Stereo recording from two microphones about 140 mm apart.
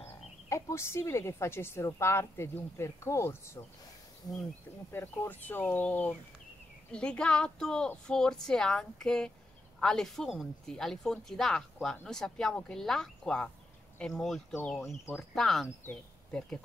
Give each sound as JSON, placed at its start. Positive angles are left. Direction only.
{"t": 0.5, "sound": "speech", "side_deg": 20}
{"t": 4.9, "sound": "speech", "side_deg": 15}